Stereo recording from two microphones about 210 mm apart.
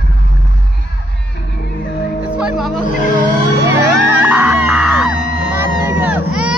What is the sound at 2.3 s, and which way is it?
Music, 5° right (ahead or behind).